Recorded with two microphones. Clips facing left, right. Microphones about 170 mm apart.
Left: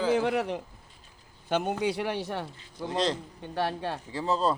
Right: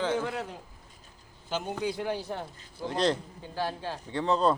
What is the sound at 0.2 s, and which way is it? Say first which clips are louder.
Speech: left 6 dB; 75° left (ahead or behind).